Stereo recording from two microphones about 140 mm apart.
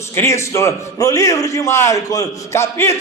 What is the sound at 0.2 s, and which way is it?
A man's voice, 20° left (ahead or behind).